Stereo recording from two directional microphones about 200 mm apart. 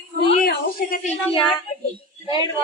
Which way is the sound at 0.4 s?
45° left (ahead or behind).